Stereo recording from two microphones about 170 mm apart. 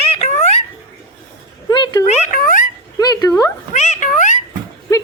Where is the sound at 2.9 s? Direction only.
20° left (ahead or behind).